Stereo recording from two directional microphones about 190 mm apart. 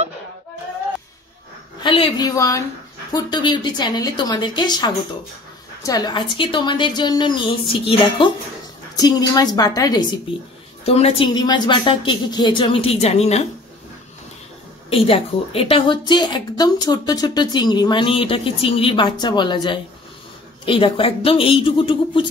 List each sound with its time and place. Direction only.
1.8 s a woman's voice: 25° left (ahead or behind)
10.9 s a woman's voice: 35° left (ahead or behind)
14.9 s a woman's voice: 30° left (ahead or behind)